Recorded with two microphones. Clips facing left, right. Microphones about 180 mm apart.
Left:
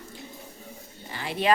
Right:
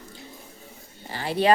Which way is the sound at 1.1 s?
35° right (ahead or behind).